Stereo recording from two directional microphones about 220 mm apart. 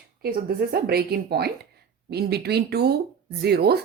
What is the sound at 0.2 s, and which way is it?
Speech, 45° right (ahead or behind).